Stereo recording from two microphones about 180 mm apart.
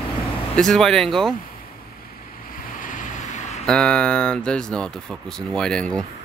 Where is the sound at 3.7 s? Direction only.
5° left (ahead or behind).